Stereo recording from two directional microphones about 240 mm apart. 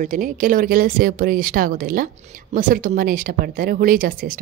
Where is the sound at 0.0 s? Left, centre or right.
Right.